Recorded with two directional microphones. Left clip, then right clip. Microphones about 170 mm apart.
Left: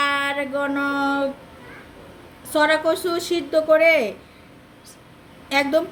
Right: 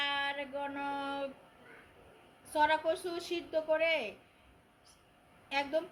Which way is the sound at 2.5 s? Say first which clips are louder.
Left 11 dB; 30° left (ahead or behind).